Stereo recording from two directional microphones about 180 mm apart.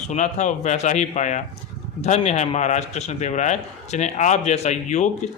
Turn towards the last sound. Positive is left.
turn(degrees=40)  # may be behind; listen again after turning